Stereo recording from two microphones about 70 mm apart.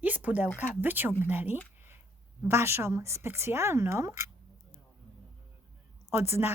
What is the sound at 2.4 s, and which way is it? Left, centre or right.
Speech, right.